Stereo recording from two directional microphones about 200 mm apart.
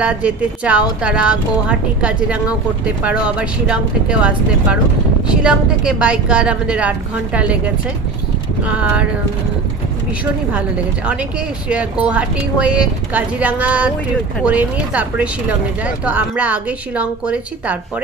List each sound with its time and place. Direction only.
0.0 s speech: 5° right (ahead or behind)
11.7 s speech: 5° right (ahead or behind)